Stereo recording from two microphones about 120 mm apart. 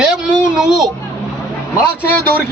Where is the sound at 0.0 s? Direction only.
5° right (ahead or behind).